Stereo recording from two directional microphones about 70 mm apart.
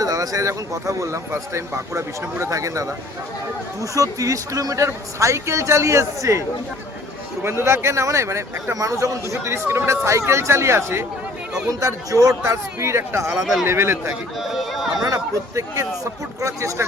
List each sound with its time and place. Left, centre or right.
0.0 s speech: right
3.9 s speech: right
7.4 s speech: right
11.7 s speech: right
13.4 s speech: centre
13.7 s speech: right
14.3 s a sound: centre
15.1 s speech: right